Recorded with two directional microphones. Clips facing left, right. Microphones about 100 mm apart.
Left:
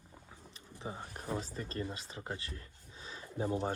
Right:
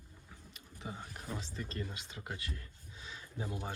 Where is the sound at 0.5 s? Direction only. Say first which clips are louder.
Left 2 dB; 30° left (ahead or behind).